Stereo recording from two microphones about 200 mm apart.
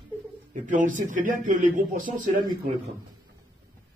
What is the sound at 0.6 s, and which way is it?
A man's voice, 40° right (ahead or behind).